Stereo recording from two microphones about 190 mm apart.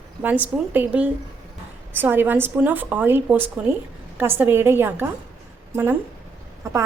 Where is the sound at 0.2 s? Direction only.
10° right (ahead or behind).